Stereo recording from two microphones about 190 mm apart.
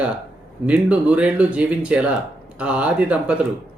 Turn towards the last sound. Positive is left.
turn(degrees=-5)  # may be behind; listen again after turning